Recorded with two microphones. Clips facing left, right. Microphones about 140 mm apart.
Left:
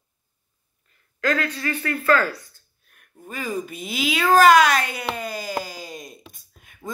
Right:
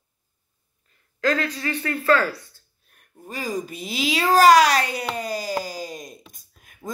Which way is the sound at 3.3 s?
35° right (ahead or behind).